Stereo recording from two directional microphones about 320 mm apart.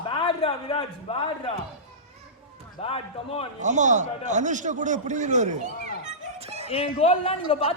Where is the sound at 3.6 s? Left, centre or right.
Right.